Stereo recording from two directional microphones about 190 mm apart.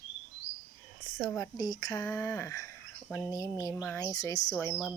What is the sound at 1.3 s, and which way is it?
Speech, 20° left (ahead or behind).